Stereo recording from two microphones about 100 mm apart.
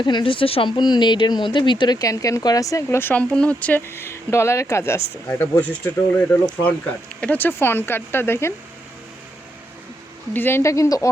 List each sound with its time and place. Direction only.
0.0 s speech: 50° left (ahead or behind); by 0.7 s 65° left (ahead or behind)
0.7 s speech: 45° left (ahead or behind)
3.0 s speech: 15° left (ahead or behind)
10.3 s speech: 20° left (ahead or behind)